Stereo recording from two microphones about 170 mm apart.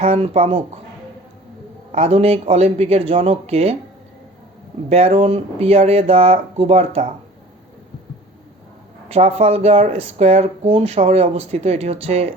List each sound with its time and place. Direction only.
0.0 s speech: 35° right (ahead or behind)
1.9 s speech: 40° right (ahead or behind)
4.9 s speech: 40° right (ahead or behind)
9.0 s speech: 35° right (ahead or behind)